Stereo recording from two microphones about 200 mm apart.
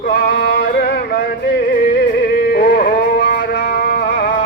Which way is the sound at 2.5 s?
45° left (ahead or behind).